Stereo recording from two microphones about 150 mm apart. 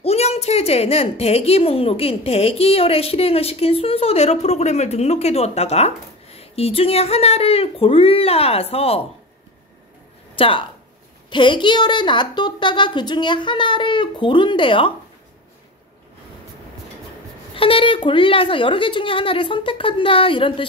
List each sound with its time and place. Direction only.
0.0 s a woman's voice: 45° left (ahead or behind)
10.3 s a woman's voice: 35° left (ahead or behind)
17.6 s a woman's voice: 35° left (ahead or behind)